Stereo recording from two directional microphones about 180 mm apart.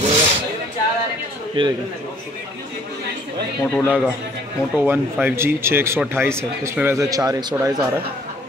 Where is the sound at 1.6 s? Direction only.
30° right (ahead or behind).